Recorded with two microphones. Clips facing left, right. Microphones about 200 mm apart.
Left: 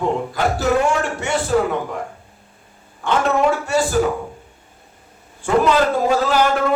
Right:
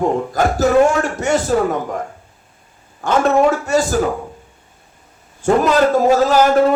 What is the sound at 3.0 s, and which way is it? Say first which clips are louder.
Speech: right 4 dB; 40° right (ahead or behind).